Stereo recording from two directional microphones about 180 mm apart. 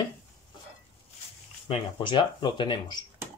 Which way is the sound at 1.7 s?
30° left (ahead or behind).